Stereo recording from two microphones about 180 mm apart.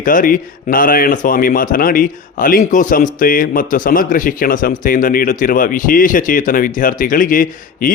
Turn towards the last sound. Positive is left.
turn(degrees=50)  # may be behind; listen again after turning